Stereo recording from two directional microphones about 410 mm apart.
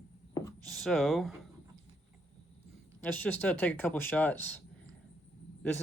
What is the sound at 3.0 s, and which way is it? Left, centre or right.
Speech, centre.